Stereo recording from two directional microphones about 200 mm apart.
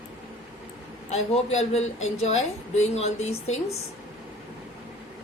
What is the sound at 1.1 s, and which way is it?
Speech, 35° left (ahead or behind).